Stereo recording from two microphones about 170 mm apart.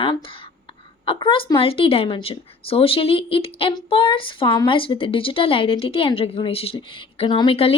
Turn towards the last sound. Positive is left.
turn(degrees=30)  # may be behind; listen again after turning